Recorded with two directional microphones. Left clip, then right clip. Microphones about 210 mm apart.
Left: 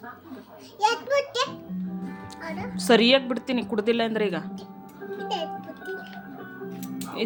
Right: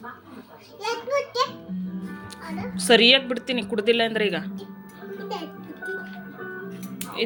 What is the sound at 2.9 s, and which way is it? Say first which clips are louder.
Speech: right 3 dB; 25° left (ahead or behind).